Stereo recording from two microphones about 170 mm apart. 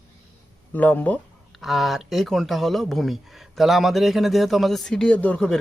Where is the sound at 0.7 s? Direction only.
10° left (ahead or behind).